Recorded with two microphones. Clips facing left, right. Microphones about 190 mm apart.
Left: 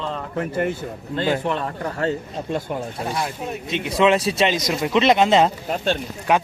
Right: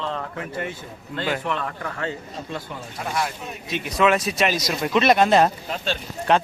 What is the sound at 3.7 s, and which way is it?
Speech, 25° left (ahead or behind).